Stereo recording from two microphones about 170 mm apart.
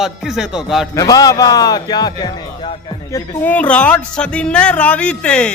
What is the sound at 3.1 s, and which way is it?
A man's voice, 10° left (ahead or behind).